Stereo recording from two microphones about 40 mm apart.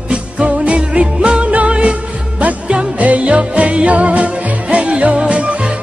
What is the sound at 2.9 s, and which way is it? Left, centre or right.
Music, right.